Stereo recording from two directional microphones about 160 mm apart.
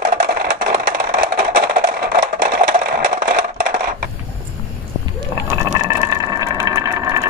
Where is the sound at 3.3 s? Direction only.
60° right (ahead or behind).